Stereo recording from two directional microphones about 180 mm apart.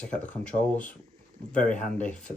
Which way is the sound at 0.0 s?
5° left (ahead or behind).